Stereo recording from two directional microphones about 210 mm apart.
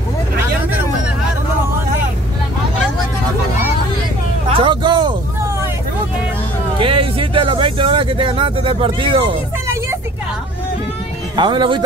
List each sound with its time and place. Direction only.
4.6 s a sound: 20° right (ahead or behind)
6.8 s music: 25° right (ahead or behind)
11.3 s speech: 20° right (ahead or behind)